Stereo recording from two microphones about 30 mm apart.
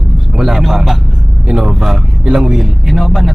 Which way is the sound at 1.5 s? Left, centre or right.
Right.